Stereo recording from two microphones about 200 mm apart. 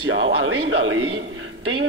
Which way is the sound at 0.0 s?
90° right.